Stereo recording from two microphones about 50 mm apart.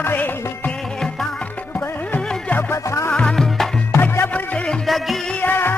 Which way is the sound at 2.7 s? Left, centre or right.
Left.